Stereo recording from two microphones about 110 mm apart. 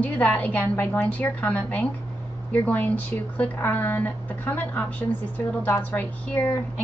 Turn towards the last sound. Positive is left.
turn(degrees=15)  # may be behind; listen again after turning